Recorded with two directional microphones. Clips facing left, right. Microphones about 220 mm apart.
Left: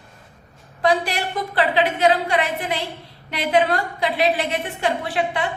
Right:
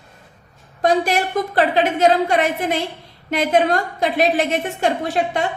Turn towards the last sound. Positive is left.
turn(degrees=-45)  # may be behind; listen again after turning